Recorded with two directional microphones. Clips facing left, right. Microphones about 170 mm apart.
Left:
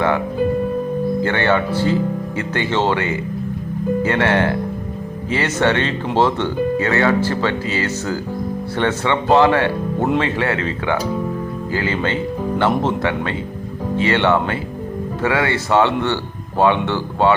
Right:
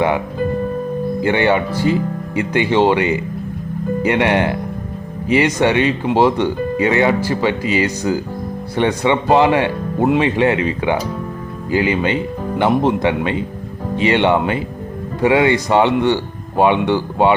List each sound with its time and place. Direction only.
1.2 s speech: 15° right (ahead or behind)